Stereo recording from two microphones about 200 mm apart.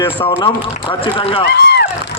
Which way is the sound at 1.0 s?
25° left (ahead or behind).